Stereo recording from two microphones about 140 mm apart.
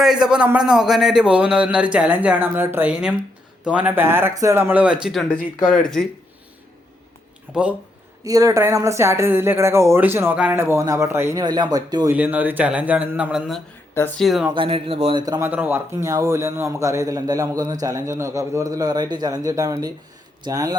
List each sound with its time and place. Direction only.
0.0 s a man's voice: 5° right (ahead or behind)
7.5 s a man's voice: 10° right (ahead or behind)
8.2 s a man's voice: 25° right (ahead or behind)
11.4 s a man's voice: 30° right (ahead or behind)
12.0 s a man's voice: 10° right (ahead or behind)
14.5 s speech: 40° right (ahead or behind)
15.2 s a man's voice: 25° right (ahead or behind)
15.4 s a man's voice: 10° right (ahead or behind)